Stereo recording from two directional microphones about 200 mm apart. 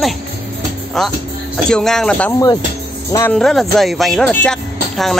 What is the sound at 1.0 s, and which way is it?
Speech, centre (ahead or behind).